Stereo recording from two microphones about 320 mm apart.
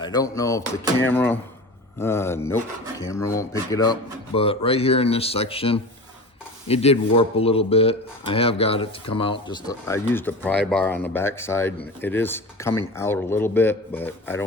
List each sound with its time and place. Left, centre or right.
0.0 s speech: centre